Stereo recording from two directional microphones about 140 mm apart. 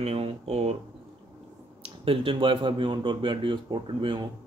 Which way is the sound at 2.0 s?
40° right (ahead or behind).